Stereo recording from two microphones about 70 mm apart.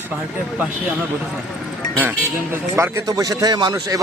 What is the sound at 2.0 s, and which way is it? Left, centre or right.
Speech, right.